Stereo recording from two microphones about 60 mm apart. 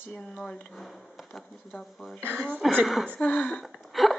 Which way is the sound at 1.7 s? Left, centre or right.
Centre.